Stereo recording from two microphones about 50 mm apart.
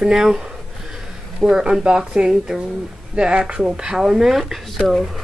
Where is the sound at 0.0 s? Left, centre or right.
Centre.